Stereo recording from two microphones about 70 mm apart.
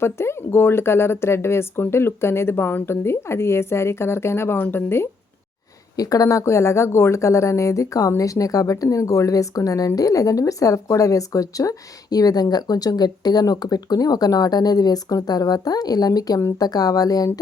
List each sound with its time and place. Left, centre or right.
0.0 s speech: left
6.0 s speech: left